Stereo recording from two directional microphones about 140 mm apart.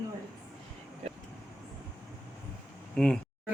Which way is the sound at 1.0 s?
45° right (ahead or behind).